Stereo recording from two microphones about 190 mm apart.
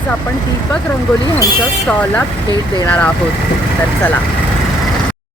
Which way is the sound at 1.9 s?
5° left (ahead or behind).